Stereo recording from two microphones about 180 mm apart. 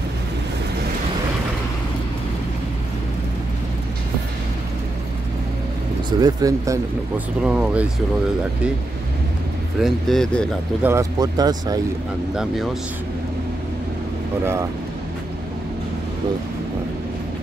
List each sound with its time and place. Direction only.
6.0 s speech: 20° right (ahead or behind)
7.4 s speech: 5° right (ahead or behind)
9.8 s speech: centre (ahead or behind)
10.8 s speech: 15° right (ahead or behind)
14.4 s speech: 15° right (ahead or behind)